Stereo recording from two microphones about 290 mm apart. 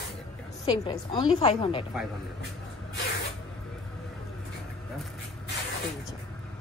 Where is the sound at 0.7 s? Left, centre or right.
Centre.